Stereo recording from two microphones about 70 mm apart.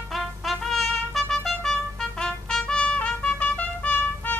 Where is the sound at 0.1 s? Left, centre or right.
Centre.